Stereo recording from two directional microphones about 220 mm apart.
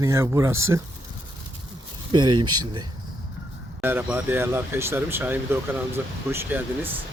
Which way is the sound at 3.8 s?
10° right (ahead or behind).